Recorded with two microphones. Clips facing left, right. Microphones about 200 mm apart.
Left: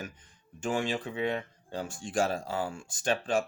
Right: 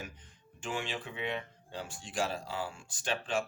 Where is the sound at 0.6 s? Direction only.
45° left (ahead or behind).